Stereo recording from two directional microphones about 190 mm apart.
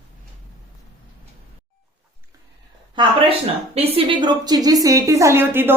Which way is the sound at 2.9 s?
25° right (ahead or behind).